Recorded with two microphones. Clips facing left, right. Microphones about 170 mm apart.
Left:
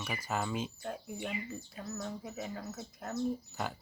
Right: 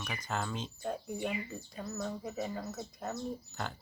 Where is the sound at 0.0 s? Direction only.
5° left (ahead or behind).